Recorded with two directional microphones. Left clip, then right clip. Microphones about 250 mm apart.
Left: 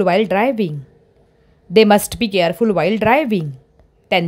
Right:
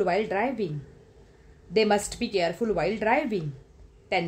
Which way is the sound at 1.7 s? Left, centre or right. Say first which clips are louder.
Left 11 dB; left.